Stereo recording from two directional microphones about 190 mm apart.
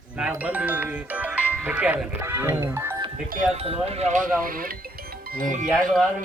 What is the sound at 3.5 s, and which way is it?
Speech, 30° right (ahead or behind).